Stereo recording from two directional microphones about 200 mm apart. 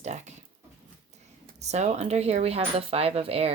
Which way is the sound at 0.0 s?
35° right (ahead or behind).